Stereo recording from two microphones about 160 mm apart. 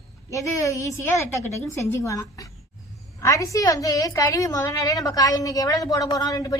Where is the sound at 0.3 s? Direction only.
20° left (ahead or behind).